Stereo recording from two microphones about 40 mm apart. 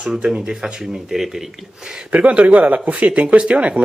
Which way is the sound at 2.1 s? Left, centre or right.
Right.